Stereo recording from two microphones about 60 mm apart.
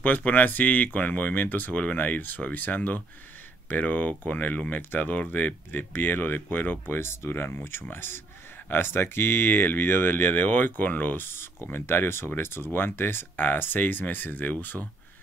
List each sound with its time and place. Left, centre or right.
0.0 s speech: left